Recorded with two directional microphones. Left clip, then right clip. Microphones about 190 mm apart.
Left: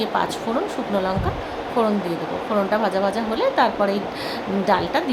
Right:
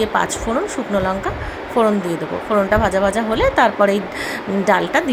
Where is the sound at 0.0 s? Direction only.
25° right (ahead or behind).